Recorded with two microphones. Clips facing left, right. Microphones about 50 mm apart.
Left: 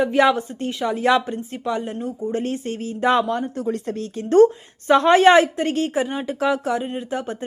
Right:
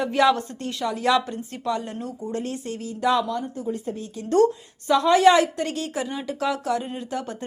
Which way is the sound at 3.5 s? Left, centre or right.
Left.